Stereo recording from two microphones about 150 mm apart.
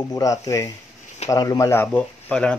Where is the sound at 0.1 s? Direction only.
20° left (ahead or behind).